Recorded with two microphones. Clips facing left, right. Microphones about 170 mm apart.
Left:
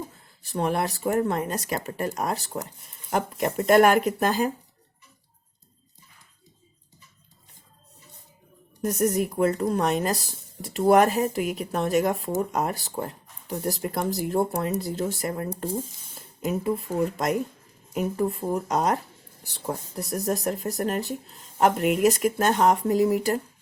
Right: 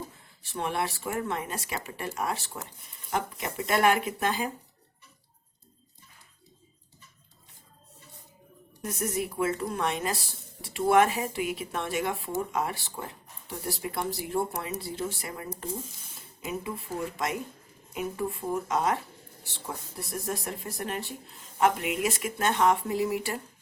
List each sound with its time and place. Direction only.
0.4 s speech: 40° left (ahead or behind)
8.8 s speech: 40° left (ahead or behind)
15.4 s speech: 30° left (ahead or behind)
16.1 s speech: 45° left (ahead or behind)